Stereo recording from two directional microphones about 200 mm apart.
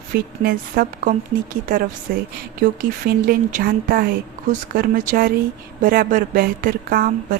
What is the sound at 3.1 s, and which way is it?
A woman's voice, 45° right (ahead or behind).